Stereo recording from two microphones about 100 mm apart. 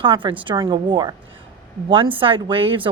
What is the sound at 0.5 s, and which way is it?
Speech, 45° right (ahead or behind).